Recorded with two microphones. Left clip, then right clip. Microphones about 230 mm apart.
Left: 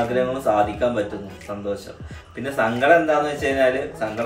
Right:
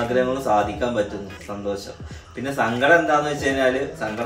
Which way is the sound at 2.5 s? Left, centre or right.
Centre.